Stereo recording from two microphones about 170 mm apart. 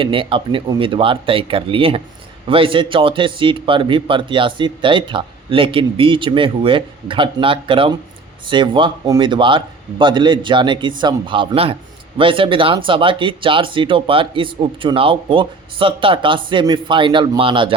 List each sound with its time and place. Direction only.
0.0 s a man's voice: 30° right (ahead or behind)